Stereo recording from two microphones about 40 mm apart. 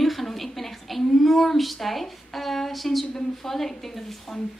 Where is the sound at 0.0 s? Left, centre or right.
Centre.